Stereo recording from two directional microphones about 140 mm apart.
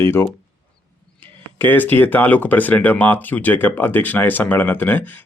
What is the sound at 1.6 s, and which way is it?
Speech, 15° left (ahead or behind).